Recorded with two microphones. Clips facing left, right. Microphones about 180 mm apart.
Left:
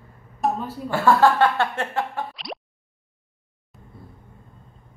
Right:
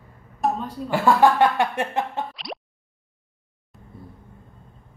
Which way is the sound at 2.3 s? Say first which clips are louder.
Even; centre (ahead or behind).